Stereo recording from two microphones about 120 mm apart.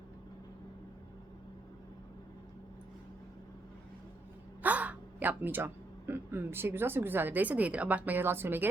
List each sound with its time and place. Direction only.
4.6 s speech: 10° right (ahead or behind)